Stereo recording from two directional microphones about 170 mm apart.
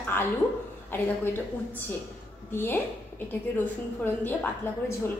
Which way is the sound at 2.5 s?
15° left (ahead or behind).